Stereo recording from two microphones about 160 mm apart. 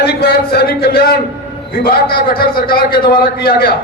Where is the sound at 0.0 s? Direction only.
75° left (ahead or behind).